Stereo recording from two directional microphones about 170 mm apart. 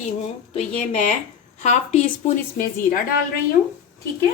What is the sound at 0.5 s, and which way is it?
A woman's voice, 45° left (ahead or behind).